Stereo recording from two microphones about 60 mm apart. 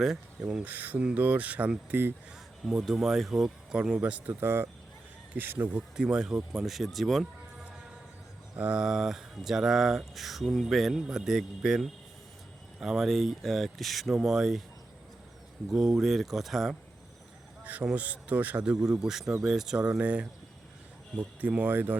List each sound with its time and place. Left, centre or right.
0.6 s speech: right
1.9 s speech: right
2.8 s speech: centre; by 4.4 s right
4.4 s speech: right
6.0 s speech: centre
8.5 s speech: right
8.8 s speech: centre
15.7 s speech: centre
17.6 s a sound: right
17.9 s speech: right
18.6 s speech: centre; by 21.9 s right